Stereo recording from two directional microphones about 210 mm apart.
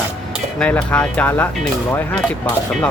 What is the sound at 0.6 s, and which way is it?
Speech, 5° left (ahead or behind).